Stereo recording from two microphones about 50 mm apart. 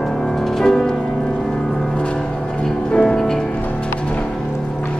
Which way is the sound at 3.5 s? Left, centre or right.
Left.